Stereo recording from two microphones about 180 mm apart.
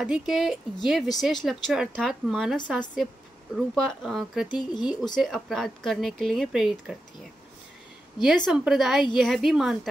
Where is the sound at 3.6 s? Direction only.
Centre (ahead or behind).